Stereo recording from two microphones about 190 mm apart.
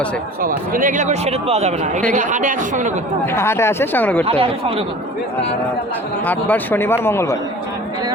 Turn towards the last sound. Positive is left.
turn(degrees=15)  # may be behind; listen again after turning